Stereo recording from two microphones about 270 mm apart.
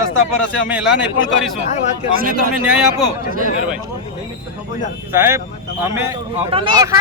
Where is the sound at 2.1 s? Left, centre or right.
Right.